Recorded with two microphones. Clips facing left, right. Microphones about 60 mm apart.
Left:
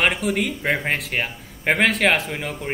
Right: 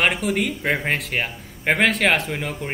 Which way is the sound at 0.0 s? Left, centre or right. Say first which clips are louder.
Even; centre.